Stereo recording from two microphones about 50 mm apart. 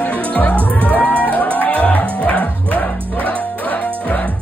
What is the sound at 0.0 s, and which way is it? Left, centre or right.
Music, left.